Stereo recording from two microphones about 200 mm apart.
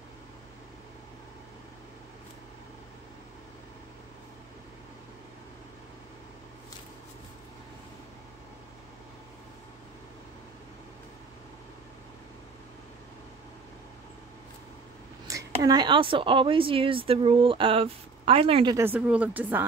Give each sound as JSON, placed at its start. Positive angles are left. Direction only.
{"t": 15.2, "sound": "a woman's voice", "side_deg": -20}
{"t": 18.8, "sound": "speech", "side_deg": -5}